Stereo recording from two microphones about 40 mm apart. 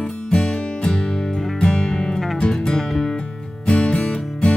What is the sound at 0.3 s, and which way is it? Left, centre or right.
Music, centre.